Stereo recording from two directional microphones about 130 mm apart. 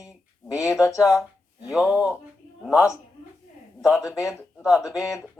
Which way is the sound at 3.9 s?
20° left (ahead or behind).